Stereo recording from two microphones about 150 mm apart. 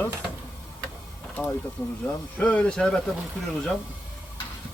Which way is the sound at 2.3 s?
10° left (ahead or behind).